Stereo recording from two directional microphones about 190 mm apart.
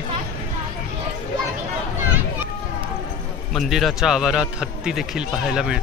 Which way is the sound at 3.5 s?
Centre (ahead or behind).